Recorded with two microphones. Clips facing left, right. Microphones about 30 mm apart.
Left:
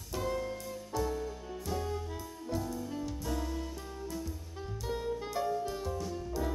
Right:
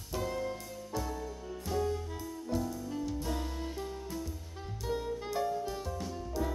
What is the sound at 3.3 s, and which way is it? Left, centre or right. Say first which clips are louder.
Music: left 1 dB; centre.